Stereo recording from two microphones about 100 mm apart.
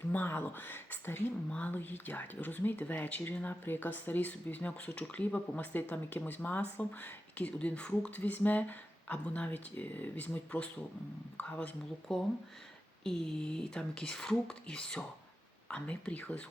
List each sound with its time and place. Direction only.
0.1 s speech: 20° left (ahead or behind)